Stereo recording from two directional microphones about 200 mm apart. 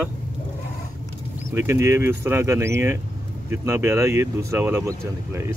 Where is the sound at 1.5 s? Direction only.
15° right (ahead or behind).